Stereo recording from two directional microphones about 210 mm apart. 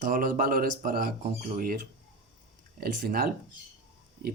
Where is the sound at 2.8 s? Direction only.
45° right (ahead or behind).